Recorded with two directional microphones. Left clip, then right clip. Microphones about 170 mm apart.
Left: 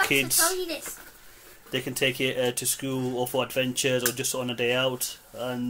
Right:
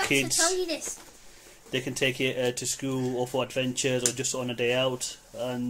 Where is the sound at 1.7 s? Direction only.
10° right (ahead or behind).